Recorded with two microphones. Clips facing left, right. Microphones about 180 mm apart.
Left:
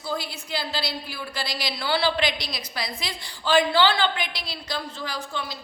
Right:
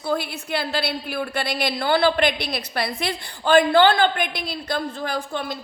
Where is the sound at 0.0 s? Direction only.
60° right (ahead or behind).